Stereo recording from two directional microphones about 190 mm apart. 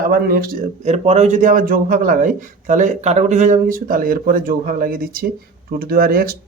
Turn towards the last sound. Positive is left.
turn(degrees=-50)  # may be behind; listen again after turning